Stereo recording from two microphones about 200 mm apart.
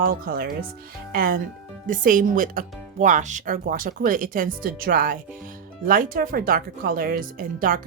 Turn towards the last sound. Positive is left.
turn(degrees=-45)  # may be behind; listen again after turning